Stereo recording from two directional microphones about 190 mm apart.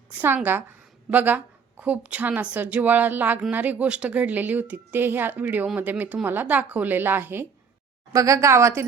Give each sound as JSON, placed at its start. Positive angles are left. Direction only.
{"t": 0.1, "sound": "a woman's voice", "side_deg": -10}